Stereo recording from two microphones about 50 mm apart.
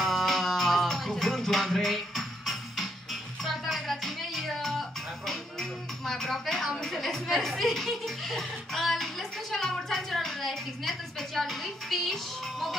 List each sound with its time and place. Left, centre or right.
0.0 s music: centre